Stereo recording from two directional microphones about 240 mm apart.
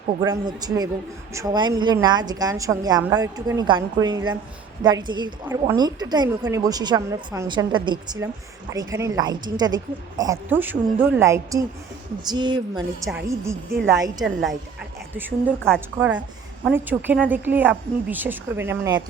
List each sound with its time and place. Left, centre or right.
0.2 s a woman's voice: centre
13.1 s a woman's voice: centre